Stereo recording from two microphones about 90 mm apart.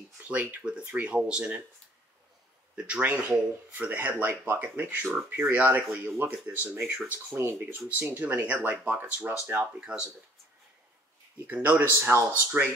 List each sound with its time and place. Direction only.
0.2 s speech: 15° right (ahead or behind)
2.7 s speech: 15° right (ahead or behind)
9.8 s speech: 10° right (ahead or behind)
11.4 s speech: 15° right (ahead or behind)